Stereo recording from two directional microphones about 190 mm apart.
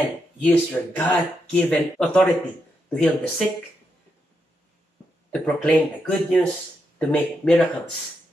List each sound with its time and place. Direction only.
0.4 s speech: 10° left (ahead or behind)
5.3 s speech: 5° left (ahead or behind)